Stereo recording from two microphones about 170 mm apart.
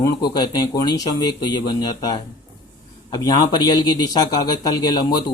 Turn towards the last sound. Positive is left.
turn(degrees=25)  # may be behind; listen again after turning